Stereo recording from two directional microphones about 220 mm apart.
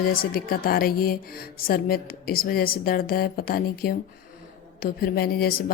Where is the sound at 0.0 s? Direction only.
40° left (ahead or behind).